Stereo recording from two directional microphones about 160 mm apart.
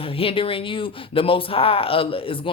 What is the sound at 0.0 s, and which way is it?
Speech, 35° left (ahead or behind).